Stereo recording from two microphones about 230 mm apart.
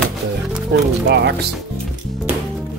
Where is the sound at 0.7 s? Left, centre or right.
Right.